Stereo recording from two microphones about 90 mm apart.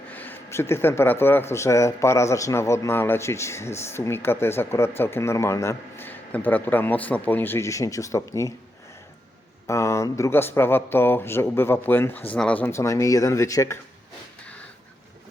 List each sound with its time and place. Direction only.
0.1 s speech: 20° left (ahead or behind); by 8.5 s 35° left (ahead or behind)
9.6 s speech: 35° left (ahead or behind); by 12.7 s 15° left (ahead or behind)
12.7 s speech: 35° left (ahead or behind)